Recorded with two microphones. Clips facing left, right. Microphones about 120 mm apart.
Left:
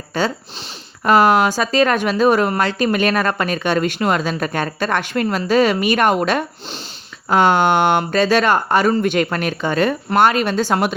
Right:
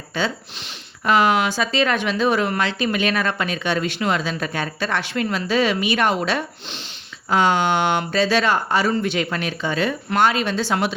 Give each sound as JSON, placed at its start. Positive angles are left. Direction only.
{"t": 0.1, "sound": "speech", "side_deg": 45}